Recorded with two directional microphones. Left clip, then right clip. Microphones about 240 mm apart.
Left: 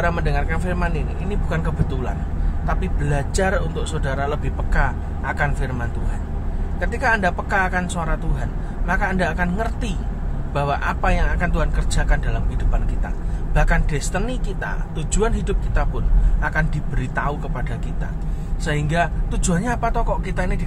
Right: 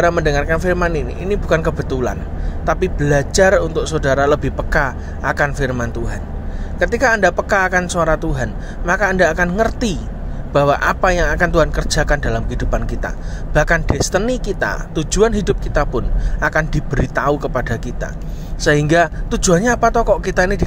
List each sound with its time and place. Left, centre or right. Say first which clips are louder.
0.0 s a man's voice: right 8 dB; right